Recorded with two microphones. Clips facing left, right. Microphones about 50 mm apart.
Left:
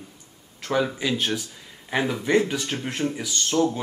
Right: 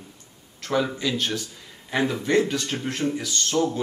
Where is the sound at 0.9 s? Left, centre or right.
Centre.